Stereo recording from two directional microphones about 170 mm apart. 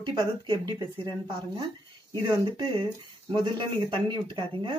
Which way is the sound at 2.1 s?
25° right (ahead or behind).